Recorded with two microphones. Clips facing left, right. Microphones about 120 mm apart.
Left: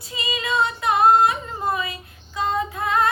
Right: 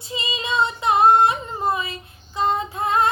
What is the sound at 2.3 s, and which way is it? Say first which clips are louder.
Child singing: right 2 dB; 30° right (ahead or behind).